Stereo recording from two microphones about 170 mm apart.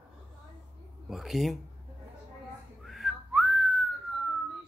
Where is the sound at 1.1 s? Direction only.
Centre (ahead or behind).